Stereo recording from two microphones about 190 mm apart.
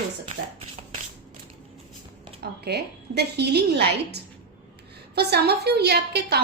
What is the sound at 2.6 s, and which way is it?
A woman's voice, 60° right (ahead or behind).